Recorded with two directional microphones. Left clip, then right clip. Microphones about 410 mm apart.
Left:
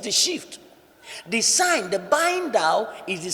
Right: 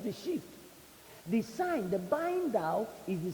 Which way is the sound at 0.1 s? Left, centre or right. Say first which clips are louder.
Left 18 dB; centre.